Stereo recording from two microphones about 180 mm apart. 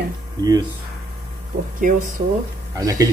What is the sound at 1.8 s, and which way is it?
Speech, 45° right (ahead or behind).